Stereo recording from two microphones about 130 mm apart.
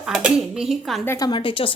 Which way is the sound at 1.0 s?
30° left (ahead or behind).